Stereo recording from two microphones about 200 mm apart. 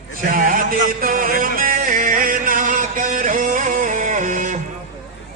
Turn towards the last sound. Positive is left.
turn(degrees=-40)  # may be behind; listen again after turning